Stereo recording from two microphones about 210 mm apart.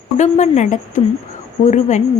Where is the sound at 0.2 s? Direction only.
35° left (ahead or behind).